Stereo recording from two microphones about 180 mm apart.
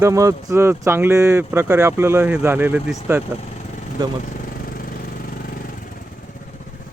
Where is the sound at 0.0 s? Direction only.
15° right (ahead or behind).